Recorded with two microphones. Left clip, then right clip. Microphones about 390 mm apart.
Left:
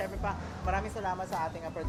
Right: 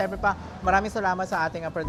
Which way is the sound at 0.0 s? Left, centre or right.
Right.